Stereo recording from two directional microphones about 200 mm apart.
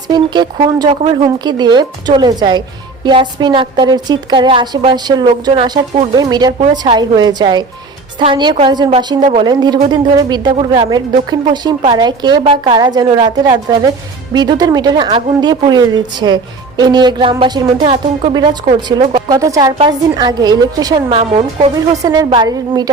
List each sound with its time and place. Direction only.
0.1 s a woman's voice: 20° right (ahead or behind)
18.9 s a woman's voice: 20° right (ahead or behind)
21.1 s a woman's voice: 30° right (ahead or behind)
22.0 s a woman's voice: 20° right (ahead or behind)